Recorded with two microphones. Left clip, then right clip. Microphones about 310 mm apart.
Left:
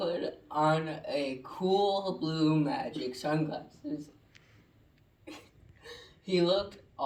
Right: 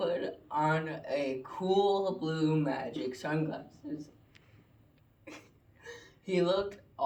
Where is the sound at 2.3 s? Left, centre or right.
Centre.